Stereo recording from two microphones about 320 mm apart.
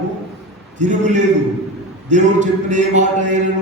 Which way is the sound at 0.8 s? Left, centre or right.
Right.